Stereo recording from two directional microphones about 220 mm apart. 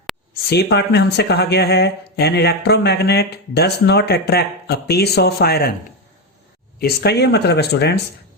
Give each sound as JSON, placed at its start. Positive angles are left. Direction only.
{"t": 0.5, "sound": "speech", "side_deg": 50}
{"t": 6.7, "sound": "speech", "side_deg": 45}